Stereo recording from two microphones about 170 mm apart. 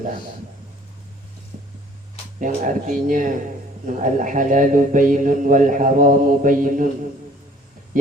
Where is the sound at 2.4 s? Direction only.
50° right (ahead or behind).